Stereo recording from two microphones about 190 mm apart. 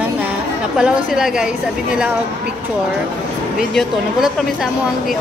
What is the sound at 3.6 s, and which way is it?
Speech, centre (ahead or behind).